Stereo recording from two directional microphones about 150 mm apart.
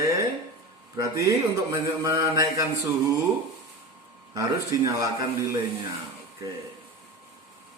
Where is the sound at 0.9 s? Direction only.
20° right (ahead or behind).